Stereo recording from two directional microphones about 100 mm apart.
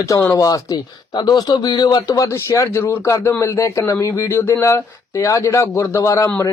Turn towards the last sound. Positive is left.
turn(degrees=30)  # may be behind; listen again after turning